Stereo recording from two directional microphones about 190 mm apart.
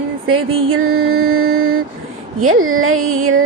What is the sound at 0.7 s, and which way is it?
Speech, 90° right.